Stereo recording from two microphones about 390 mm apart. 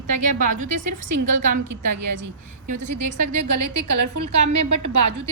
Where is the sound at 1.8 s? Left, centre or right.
Right.